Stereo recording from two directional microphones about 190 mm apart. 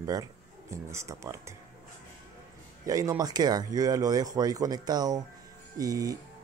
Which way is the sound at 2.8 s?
15° right (ahead or behind).